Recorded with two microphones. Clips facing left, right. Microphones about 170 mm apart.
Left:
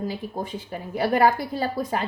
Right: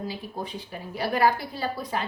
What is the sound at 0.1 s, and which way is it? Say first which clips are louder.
A woman's voice: left 4 dB; 50° left (ahead or behind).